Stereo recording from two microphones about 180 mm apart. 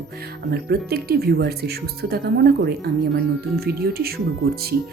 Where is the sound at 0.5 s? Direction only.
60° right (ahead or behind).